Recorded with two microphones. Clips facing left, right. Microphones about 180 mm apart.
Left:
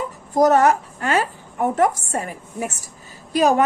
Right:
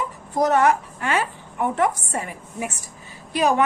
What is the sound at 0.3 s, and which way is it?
A woman's voice, 40° left (ahead or behind).